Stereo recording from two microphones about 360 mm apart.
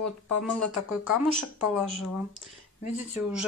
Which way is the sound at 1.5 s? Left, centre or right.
Centre.